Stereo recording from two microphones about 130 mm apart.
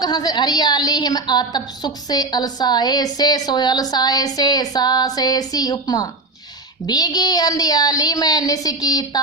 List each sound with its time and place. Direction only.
0.0 s a woman's voice: 30° left (ahead or behind)